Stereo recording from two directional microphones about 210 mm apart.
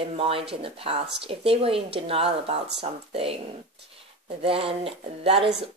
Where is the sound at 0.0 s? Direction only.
25° right (ahead or behind).